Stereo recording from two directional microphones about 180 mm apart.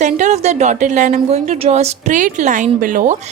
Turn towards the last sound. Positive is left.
turn(degrees=-45)  # may be behind; listen again after turning